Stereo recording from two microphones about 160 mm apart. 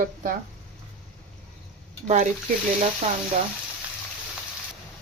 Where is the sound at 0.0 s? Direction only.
55° right (ahead or behind).